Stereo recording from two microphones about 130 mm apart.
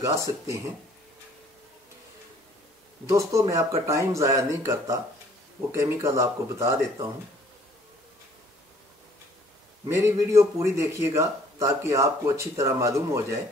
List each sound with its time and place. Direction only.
0.0 s a man's voice: 20° right (ahead or behind)
3.1 s a man's voice: 25° right (ahead or behind)
9.8 s a man's voice: 20° right (ahead or behind)